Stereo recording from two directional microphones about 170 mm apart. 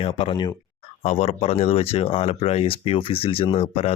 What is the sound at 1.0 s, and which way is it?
Speech, 35° left (ahead or behind).